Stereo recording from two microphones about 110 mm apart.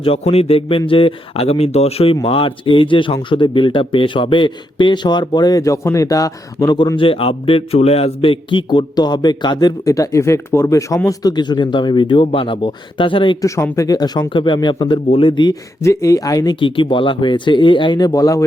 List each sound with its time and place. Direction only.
0.0 s speech: 65° left (ahead or behind)
2.2 s speech: 55° left (ahead or behind); by 6.7 s 30° left (ahead or behind)
6.9 s speech: 55° left (ahead or behind)
13.4 s speech: 30° left (ahead or behind); by 15.5 s 50° left (ahead or behind)
15.8 s speech: 30° left (ahead or behind)
16.6 s speech: 50° left (ahead or behind); by 18.4 s 30° left (ahead or behind)